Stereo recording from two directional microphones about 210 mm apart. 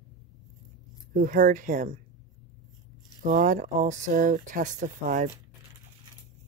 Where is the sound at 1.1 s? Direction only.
40° right (ahead or behind).